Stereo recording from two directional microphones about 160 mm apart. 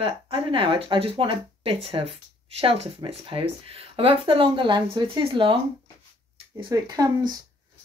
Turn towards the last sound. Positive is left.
turn(degrees=-25)  # may be behind; listen again after turning